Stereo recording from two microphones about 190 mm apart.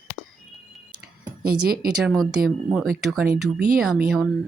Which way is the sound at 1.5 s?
50° right (ahead or behind).